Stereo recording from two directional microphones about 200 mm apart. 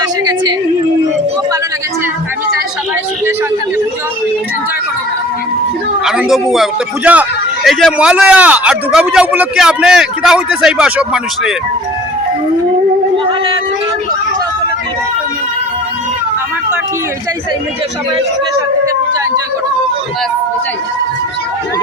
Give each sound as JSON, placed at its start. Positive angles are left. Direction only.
{"t": 0.0, "sound": "a sound", "side_deg": -20}
{"t": 6.1, "sound": "a man's voice", "side_deg": 0}
{"t": 13.2, "sound": "speech", "side_deg": -25}